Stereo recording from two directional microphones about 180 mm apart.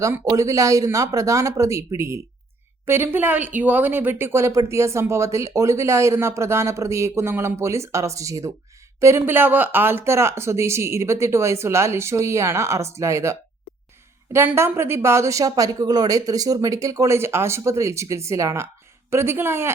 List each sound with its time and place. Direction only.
0.0 s speech: 15° right (ahead or behind)
14.3 s speech: 15° right (ahead or behind)